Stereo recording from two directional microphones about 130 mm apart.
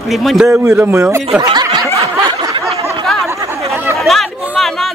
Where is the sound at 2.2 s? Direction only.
35° right (ahead or behind).